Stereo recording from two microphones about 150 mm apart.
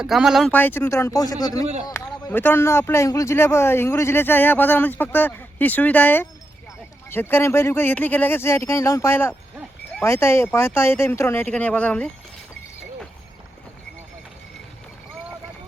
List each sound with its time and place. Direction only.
0.0 s speech: 5° right (ahead or behind)
0.5 s speech: 10° left (ahead or behind)